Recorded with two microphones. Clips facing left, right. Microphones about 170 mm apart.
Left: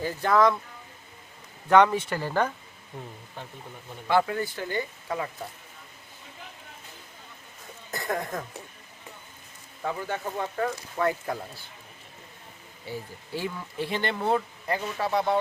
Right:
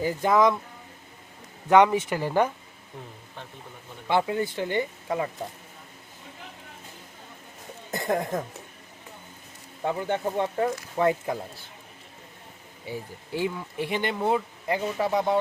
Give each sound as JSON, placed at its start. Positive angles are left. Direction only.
{"t": 0.0, "sound": "speech", "side_deg": -15}
{"t": 1.7, "sound": "speech", "side_deg": -15}
{"t": 4.0, "sound": "speech", "side_deg": -20}
{"t": 7.9, "sound": "speech", "side_deg": -25}
{"t": 9.8, "sound": "speech", "side_deg": -25}
{"t": 12.8, "sound": "speech", "side_deg": -15}